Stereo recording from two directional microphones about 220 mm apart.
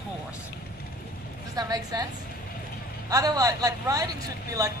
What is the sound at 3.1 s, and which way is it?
A man's voice, 15° right (ahead or behind).